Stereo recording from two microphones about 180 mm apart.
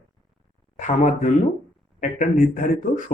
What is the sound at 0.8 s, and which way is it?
Speech, 40° left (ahead or behind).